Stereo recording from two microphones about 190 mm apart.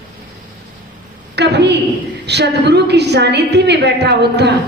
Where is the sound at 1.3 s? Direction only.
60° right (ahead or behind).